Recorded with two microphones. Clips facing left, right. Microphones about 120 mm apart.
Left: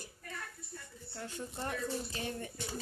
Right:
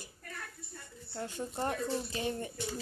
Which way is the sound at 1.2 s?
25° right (ahead or behind).